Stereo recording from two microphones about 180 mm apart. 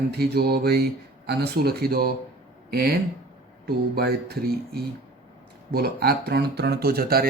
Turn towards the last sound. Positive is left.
turn(degrees=-55)  # may be behind; listen again after turning